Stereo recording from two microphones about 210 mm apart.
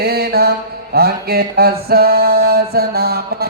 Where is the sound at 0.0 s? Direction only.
50° right (ahead or behind).